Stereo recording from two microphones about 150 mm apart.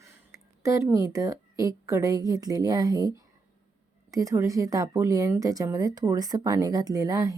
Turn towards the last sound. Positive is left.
turn(degrees=-25)  # may be behind; listen again after turning